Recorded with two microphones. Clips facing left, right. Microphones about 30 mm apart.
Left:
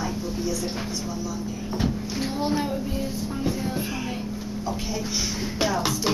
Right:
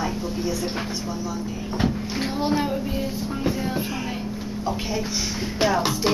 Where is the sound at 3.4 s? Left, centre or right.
Centre.